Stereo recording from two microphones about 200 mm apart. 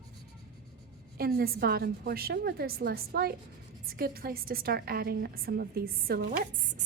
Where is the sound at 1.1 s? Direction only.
50° right (ahead or behind).